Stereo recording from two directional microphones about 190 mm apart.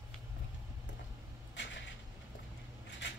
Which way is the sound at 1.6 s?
70° left (ahead or behind).